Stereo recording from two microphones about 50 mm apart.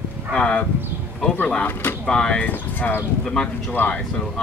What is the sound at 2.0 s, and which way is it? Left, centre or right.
Speech, centre.